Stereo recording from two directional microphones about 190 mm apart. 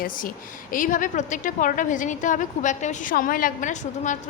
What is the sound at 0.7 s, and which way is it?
A woman's voice, 45° left (ahead or behind).